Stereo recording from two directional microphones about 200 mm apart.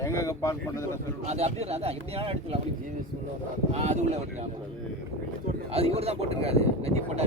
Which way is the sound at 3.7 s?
35° right (ahead or behind).